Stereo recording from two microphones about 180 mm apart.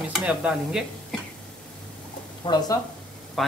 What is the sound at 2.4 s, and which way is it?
Speech, 25° left (ahead or behind).